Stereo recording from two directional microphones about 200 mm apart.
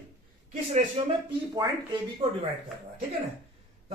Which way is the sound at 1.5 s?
20° right (ahead or behind).